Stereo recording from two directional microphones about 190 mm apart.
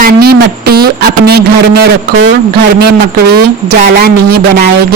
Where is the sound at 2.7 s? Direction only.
55° right (ahead or behind).